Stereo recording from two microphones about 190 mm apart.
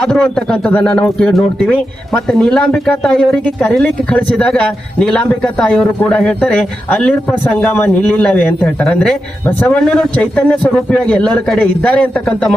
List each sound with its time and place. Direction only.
0.0 s a man's voice: 5° left (ahead or behind)